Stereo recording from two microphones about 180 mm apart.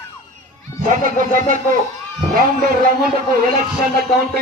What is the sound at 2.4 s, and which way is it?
A man's voice, 55° right (ahead or behind).